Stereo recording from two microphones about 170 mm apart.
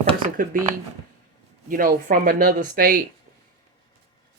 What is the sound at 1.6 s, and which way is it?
Speech, 55° right (ahead or behind).